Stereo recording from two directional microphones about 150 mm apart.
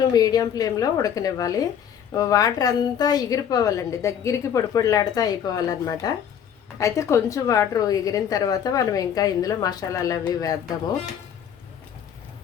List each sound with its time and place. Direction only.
0.1 s a woman's voice: 25° left (ahead or behind)